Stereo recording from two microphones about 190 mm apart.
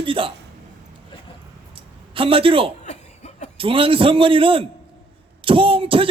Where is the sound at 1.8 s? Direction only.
30° right (ahead or behind).